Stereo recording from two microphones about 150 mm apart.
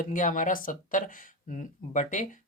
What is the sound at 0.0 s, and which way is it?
Speech, 60° left (ahead or behind).